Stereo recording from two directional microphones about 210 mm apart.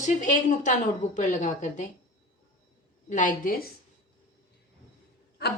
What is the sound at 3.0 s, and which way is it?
Speech, 35° left (ahead or behind).